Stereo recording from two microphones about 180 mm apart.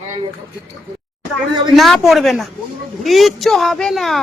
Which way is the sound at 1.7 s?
Centre (ahead or behind).